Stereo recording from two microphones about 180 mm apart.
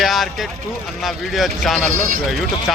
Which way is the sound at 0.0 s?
Centre (ahead or behind).